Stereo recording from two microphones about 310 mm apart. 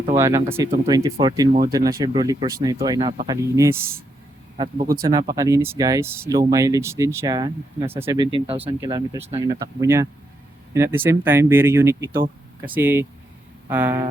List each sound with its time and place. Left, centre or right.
0.2 s speech: centre